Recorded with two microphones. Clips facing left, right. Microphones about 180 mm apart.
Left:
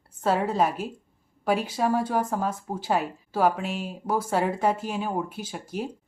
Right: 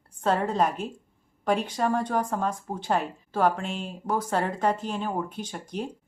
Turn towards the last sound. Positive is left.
turn(degrees=5)  # may be behind; listen again after turning